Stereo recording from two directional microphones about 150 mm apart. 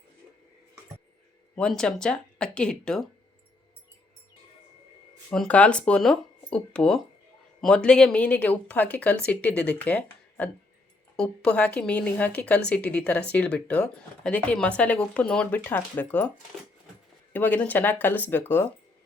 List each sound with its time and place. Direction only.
1.5 s speech: 5° left (ahead or behind)
5.3 s speech: 5° left (ahead or behind)
17.3 s speech: 10° left (ahead or behind)